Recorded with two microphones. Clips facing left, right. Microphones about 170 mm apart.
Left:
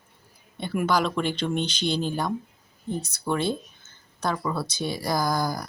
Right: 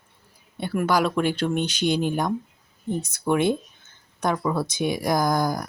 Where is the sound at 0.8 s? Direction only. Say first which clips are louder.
Right 3 dB; 10° right (ahead or behind).